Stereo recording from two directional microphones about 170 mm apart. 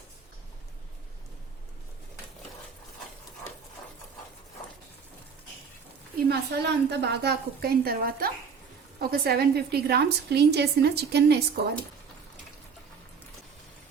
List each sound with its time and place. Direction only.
6.2 s a woman's voice: 80° right